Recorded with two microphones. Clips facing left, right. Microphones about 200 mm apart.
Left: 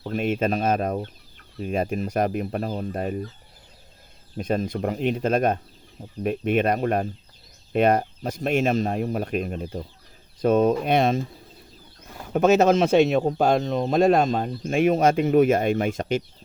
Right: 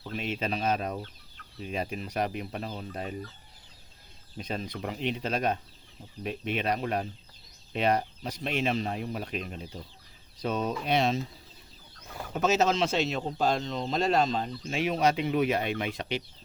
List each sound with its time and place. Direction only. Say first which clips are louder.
0.0 s speech: left 9 dB; 50° left (ahead or behind)
4.4 s speech: left 10 dB; 50° left (ahead or behind)
12.3 s speech: left 8 dB; 55° left (ahead or behind)